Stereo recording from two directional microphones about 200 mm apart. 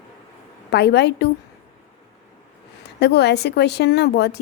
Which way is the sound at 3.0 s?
55° left (ahead or behind).